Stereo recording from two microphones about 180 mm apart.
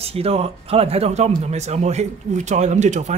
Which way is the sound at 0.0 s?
35° right (ahead or behind).